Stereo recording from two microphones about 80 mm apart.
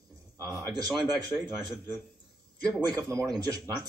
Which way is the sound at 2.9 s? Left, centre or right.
Right.